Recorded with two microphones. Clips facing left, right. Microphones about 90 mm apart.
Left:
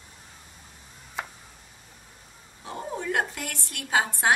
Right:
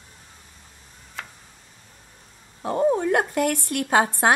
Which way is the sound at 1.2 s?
15° left (ahead or behind).